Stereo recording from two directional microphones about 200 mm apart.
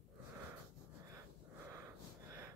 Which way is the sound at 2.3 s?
15° right (ahead or behind).